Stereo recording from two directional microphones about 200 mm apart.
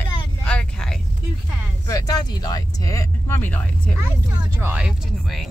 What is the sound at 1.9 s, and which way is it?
Speech, 20° left (ahead or behind).